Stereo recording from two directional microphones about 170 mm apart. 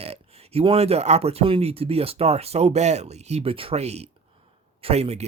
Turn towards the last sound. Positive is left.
turn(degrees=-40)  # may be behind; listen again after turning